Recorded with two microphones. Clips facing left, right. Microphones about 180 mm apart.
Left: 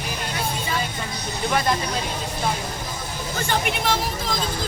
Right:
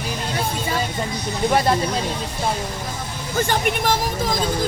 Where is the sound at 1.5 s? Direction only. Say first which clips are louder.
Right 4 dB; 35° right (ahead or behind).